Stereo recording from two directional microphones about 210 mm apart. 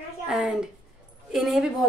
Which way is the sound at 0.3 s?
5° right (ahead or behind).